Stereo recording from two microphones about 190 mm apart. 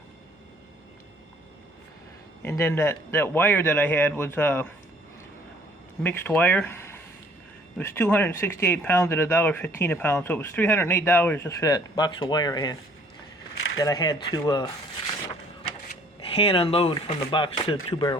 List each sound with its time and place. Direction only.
2.4 s speech: 15° left (ahead or behind)
6.0 s speech: 10° left (ahead or behind)
13.7 s a man's voice: 20° left (ahead or behind)
16.3 s a man's voice: 30° left (ahead or behind)